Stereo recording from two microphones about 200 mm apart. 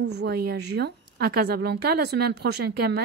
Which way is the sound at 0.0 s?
55° right (ahead or behind).